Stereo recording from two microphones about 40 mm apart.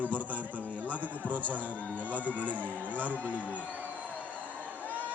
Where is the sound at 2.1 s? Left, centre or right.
Left.